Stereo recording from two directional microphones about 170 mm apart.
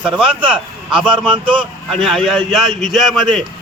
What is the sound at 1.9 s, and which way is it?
A man's voice, centre (ahead or behind).